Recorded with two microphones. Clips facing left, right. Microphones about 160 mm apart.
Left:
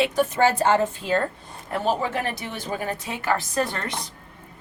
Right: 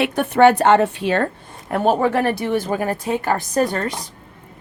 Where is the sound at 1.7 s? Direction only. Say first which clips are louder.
Right 7 dB; 55° right (ahead or behind).